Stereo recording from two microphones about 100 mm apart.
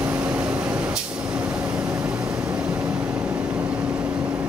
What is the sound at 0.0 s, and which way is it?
Vehicle, 15° right (ahead or behind).